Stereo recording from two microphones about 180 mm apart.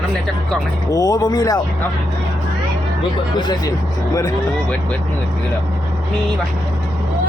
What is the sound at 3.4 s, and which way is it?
Speech, 25° left (ahead or behind).